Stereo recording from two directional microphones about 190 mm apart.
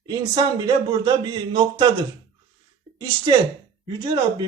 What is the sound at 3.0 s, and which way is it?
Speech, 25° right (ahead or behind).